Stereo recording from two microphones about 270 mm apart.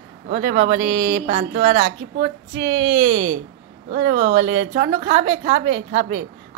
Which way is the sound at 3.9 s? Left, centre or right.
Right.